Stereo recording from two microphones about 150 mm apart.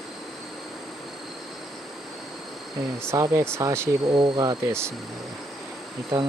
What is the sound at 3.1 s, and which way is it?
Speech, 20° right (ahead or behind).